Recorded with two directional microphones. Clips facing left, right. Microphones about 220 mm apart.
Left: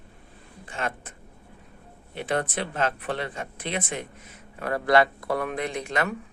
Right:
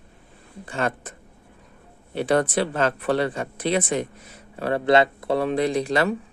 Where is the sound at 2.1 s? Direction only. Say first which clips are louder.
Right 7 dB; 35° right (ahead or behind).